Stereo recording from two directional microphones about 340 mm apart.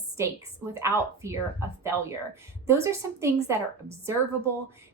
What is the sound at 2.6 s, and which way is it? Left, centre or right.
Speech, centre.